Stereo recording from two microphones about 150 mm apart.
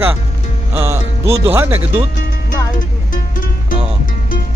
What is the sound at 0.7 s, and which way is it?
Speech, 15° right (ahead or behind).